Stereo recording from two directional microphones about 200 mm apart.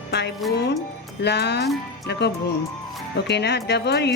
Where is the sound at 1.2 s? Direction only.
55° left (ahead or behind).